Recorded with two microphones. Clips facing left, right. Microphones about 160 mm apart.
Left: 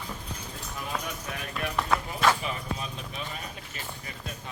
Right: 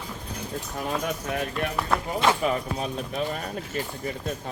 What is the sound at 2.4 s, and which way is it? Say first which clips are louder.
Speech: right 8 dB; 45° right (ahead or behind).